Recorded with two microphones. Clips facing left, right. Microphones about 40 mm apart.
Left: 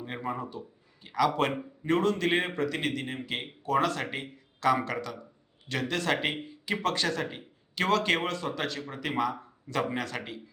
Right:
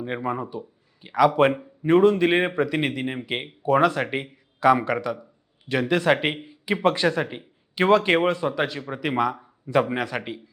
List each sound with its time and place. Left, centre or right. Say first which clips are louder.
0.0 s a man's voice: right 7 dB; right